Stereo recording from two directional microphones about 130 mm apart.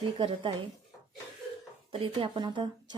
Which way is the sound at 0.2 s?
40° right (ahead or behind).